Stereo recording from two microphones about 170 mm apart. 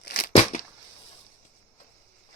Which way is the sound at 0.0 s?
70° left (ahead or behind).